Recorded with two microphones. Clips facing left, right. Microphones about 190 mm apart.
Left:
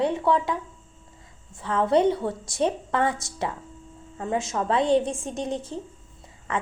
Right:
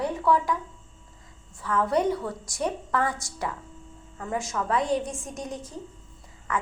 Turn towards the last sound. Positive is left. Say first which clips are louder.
# left 1 dB
turn(degrees=25)  # may be behind; listen again after turning